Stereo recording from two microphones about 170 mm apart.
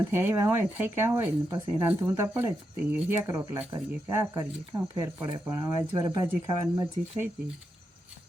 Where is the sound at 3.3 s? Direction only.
20° right (ahead or behind).